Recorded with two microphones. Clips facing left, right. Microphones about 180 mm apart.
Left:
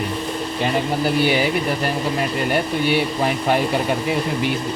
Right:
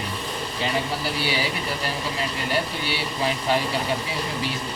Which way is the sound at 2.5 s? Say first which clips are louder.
Left 7 dB; 55° left (ahead or behind).